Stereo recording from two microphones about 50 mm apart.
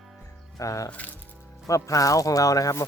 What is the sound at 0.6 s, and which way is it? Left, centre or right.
Speech, left.